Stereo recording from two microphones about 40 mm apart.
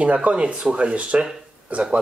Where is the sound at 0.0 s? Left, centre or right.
Right.